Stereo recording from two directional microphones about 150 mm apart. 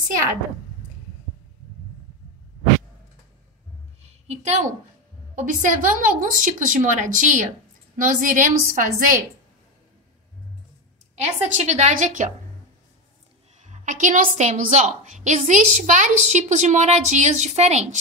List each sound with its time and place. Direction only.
4.0 s a sound: 45° right (ahead or behind)
5.3 s a woman's voice: 60° right (ahead or behind)
11.1 s a woman's voice: 50° right (ahead or behind)
13.6 s a woman's voice: 55° right (ahead or behind)